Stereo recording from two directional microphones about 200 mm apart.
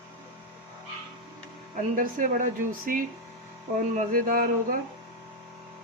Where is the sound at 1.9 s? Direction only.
40° right (ahead or behind).